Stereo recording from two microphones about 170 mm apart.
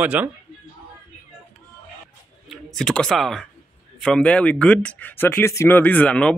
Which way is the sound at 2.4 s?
Centre (ahead or behind).